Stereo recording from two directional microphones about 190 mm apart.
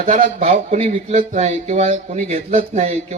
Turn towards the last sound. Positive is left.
turn(degrees=-35)  # may be behind; listen again after turning